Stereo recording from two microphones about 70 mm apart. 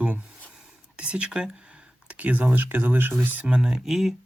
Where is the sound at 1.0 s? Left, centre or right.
Centre.